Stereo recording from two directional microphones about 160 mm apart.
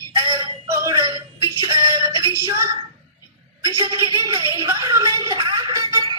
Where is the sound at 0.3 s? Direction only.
15° right (ahead or behind).